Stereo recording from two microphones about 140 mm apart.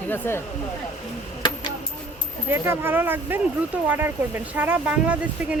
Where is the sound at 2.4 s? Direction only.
15° right (ahead or behind).